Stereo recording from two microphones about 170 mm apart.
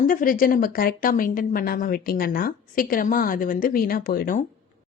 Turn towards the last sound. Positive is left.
turn(degrees=55)  # may be behind; listen again after turning